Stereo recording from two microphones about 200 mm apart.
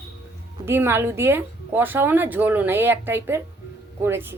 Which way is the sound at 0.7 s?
10° right (ahead or behind).